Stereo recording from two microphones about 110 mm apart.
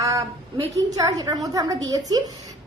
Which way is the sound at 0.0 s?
30° right (ahead or behind).